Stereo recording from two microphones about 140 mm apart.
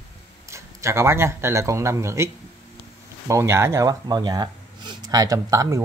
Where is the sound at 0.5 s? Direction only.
20° right (ahead or behind).